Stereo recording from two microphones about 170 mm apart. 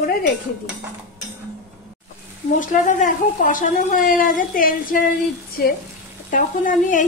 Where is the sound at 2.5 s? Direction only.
50° left (ahead or behind).